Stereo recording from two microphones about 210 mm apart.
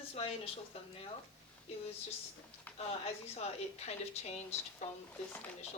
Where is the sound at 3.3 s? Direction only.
30° left (ahead or behind).